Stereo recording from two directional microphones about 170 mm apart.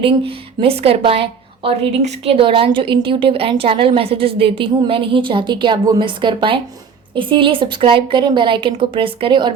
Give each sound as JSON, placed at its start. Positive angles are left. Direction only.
{"t": 0.0, "sound": "a woman's voice", "side_deg": -35}